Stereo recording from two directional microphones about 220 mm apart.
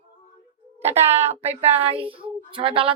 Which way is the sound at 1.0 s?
10° right (ahead or behind).